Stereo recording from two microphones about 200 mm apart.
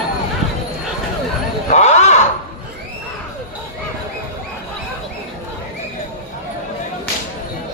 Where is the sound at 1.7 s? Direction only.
35° left (ahead or behind).